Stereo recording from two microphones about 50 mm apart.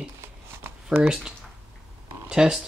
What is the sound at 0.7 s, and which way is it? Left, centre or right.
Shuffling cards, right.